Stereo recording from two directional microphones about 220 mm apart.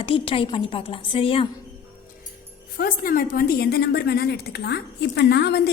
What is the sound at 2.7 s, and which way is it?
A woman's voice, 40° left (ahead or behind).